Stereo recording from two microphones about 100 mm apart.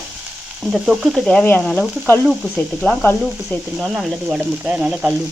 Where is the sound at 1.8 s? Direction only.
20° left (ahead or behind).